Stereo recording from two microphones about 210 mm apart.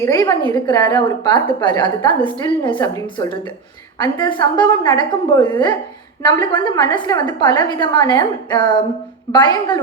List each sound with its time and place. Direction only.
0.0 s a woman's voice: 15° left (ahead or behind)